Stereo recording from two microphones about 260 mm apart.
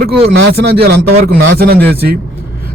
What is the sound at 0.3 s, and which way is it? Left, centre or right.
Speech, right.